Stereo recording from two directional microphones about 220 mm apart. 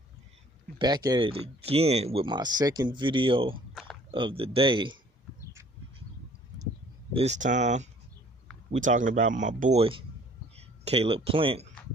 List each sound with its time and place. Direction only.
0.7 s speech: 20° right (ahead or behind)
7.2 s speech: 30° right (ahead or behind)